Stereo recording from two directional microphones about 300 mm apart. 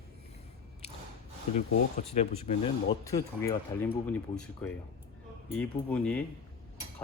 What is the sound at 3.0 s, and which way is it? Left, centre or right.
Speech, centre.